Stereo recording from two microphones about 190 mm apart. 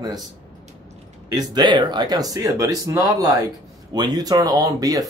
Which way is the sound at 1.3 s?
20° right (ahead or behind).